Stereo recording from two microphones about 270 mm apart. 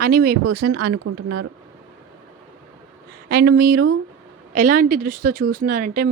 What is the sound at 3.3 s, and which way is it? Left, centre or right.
A woman's voice, right.